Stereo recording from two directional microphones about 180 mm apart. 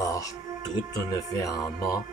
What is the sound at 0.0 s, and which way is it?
Music, 20° left (ahead or behind).